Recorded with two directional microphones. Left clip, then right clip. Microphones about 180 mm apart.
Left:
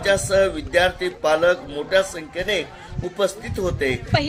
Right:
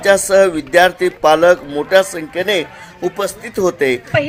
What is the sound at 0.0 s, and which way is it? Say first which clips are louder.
A man's voice: right 7 dB; 45° right (ahead or behind).